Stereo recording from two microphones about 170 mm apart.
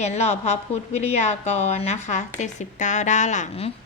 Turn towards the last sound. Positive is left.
turn(degrees=40)  # may be behind; listen again after turning